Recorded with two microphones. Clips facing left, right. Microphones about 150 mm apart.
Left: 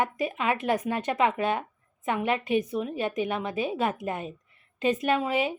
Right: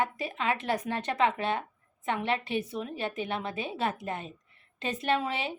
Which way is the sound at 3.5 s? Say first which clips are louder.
Left 6 dB; 25° right (ahead or behind).